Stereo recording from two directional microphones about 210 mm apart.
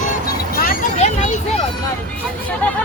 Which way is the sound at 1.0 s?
35° left (ahead or behind).